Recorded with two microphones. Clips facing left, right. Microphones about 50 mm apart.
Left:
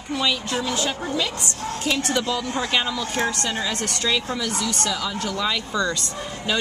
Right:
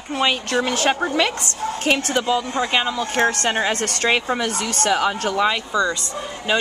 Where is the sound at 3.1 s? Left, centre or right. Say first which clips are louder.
Right 7 dB; right.